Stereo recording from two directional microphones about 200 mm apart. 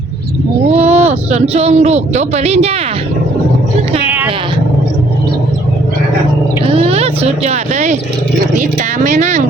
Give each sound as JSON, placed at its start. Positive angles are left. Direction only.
{"t": 0.7, "sound": "speech", "side_deg": -35}
{"t": 6.7, "sound": "speech", "side_deg": -30}
{"t": 9.0, "sound": "speech", "side_deg": -35}